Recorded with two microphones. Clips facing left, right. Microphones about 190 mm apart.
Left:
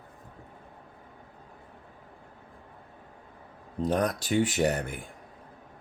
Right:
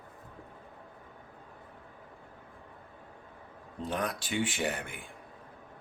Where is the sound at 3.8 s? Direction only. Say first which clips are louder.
Left 7 dB; 40° left (ahead or behind).